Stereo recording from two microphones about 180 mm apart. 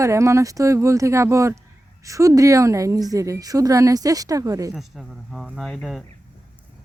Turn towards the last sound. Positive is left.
turn(degrees=0)  # may be behind; listen again after turning